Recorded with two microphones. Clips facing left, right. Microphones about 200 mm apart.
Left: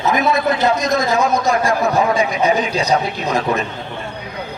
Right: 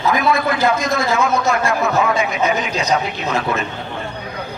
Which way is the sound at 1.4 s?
35° left (ahead or behind).